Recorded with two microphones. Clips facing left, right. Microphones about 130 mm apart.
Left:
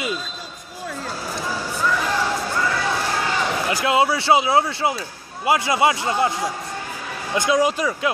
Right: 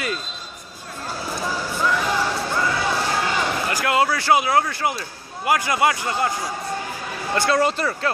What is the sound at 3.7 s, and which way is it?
Speech, 20° left (ahead or behind).